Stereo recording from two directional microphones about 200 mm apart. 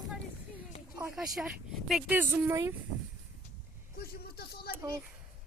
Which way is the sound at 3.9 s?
50° left (ahead or behind).